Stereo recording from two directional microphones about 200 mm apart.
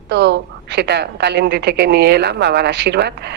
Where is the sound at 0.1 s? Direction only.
55° right (ahead or behind).